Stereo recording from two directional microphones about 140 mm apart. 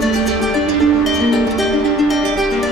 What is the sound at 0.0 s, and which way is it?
Music, centre (ahead or behind).